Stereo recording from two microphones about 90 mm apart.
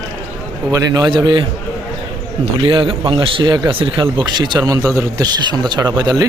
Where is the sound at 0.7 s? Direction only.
40° right (ahead or behind).